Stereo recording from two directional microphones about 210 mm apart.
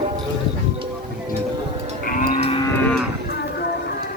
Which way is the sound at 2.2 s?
40° left (ahead or behind).